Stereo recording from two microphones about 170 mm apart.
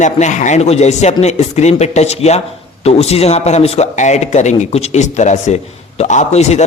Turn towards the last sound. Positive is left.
turn(degrees=40)  # may be behind; listen again after turning